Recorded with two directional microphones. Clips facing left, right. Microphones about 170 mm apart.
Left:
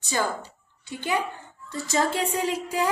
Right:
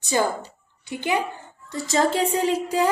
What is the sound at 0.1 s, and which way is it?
A woman's voice, 15° right (ahead or behind).